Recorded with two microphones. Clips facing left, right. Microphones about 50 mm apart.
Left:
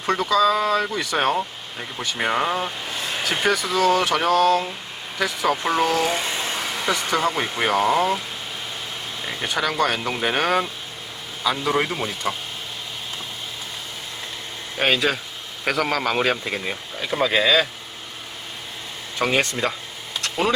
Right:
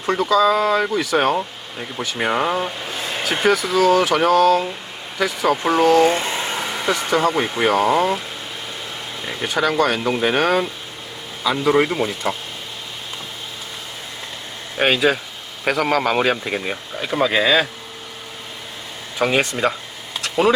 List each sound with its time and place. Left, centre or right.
0.0 s a man's voice: centre
6.1 s vehicle: right
6.8 s a man's voice: centre
9.2 s a man's voice: centre
14.8 s a man's voice: centre
19.2 s a man's voice: centre
20.2 s a sound: centre